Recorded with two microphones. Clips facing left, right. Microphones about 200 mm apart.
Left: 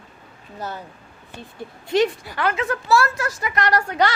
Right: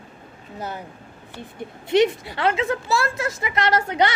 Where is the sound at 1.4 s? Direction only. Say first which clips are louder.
Right 2 dB; 20° right (ahead or behind).